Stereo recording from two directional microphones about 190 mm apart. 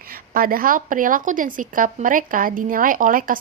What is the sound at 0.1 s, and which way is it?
A woman's voice, 50° right (ahead or behind).